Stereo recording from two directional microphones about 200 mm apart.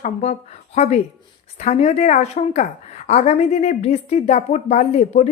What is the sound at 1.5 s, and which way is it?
Speech, 35° left (ahead or behind).